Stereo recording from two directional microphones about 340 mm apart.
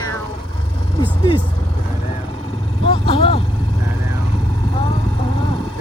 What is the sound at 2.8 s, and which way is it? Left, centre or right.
Speech, centre.